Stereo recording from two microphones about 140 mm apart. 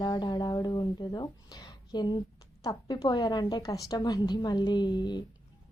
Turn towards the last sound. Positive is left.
turn(degrees=30)  # may be behind; listen again after turning